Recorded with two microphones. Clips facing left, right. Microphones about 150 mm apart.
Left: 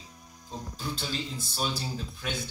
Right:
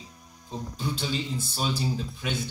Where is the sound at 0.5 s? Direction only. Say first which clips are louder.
Right 4 dB; centre (ahead or behind).